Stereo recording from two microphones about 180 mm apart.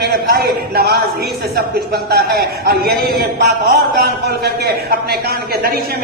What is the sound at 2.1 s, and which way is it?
Speech, 60° right (ahead or behind).